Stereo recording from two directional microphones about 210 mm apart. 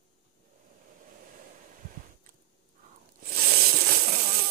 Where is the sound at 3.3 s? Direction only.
45° right (ahead or behind).